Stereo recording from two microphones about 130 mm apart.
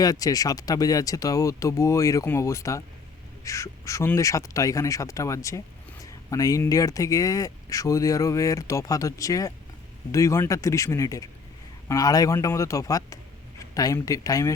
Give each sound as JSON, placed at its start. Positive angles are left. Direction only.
{"t": 0.0, "sound": "speech", "side_deg": 30}